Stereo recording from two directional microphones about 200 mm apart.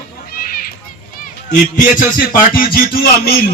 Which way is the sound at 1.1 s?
40° left (ahead or behind).